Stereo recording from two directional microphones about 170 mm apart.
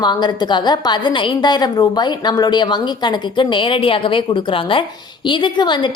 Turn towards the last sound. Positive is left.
turn(degrees=25)  # may be behind; listen again after turning